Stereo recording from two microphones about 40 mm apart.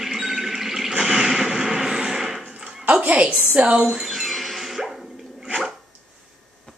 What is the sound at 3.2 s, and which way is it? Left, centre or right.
Speech, right.